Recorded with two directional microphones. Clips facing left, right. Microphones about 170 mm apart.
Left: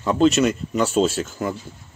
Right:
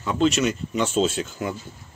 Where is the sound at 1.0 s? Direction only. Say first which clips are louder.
Left 3 dB; 50° left (ahead or behind).